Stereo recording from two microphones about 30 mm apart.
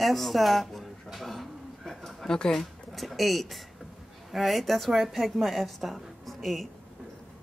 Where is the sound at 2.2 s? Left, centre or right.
Left.